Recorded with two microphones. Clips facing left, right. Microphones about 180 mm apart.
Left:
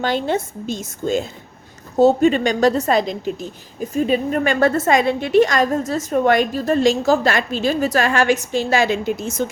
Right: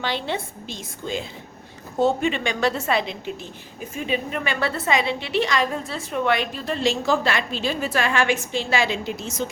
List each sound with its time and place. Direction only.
0.0 s a woman's voice: 45° left (ahead or behind)